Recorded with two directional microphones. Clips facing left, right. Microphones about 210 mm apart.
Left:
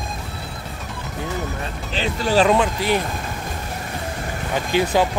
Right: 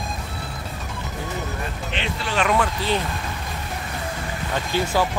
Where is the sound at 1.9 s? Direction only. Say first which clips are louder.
Left 8 dB; 40° left (ahead or behind).